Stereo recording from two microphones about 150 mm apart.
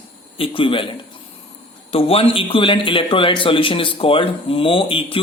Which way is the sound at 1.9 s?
40° left (ahead or behind).